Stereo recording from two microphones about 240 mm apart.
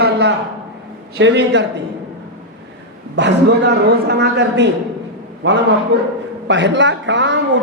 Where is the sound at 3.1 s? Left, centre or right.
Right.